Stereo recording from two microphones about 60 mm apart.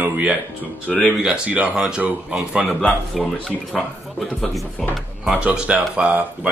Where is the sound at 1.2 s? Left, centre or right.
Right.